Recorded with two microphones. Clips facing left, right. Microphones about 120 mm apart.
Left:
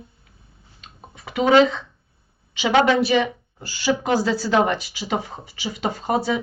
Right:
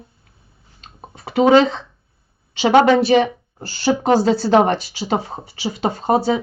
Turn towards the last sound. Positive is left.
turn(degrees=-35)  # may be behind; listen again after turning